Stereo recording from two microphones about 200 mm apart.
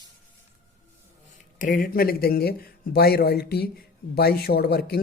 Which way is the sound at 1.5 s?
45° left (ahead or behind).